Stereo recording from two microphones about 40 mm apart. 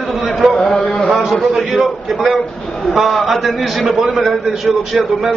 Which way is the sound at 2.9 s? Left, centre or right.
Centre.